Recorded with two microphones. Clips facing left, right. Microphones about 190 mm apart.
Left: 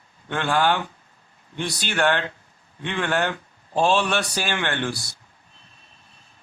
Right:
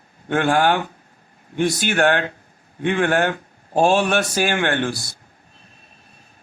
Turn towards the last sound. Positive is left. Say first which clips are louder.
# right 5 dB
turn(degrees=-50)  # may be behind; listen again after turning